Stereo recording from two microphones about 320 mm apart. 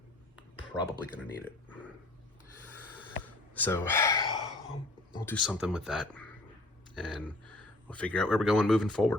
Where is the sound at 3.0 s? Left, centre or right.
Centre.